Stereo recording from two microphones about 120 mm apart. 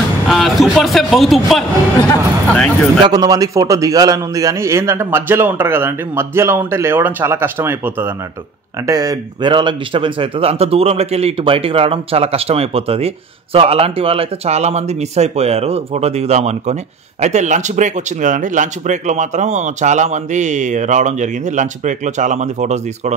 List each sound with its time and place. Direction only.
0.3 s speech: centre (ahead or behind)
3.1 s a man's voice: 30° right (ahead or behind)
8.8 s speech: 30° right (ahead or behind)
9.5 s a man's voice: 45° right (ahead or behind); by 23.1 s 75° right (ahead or behind)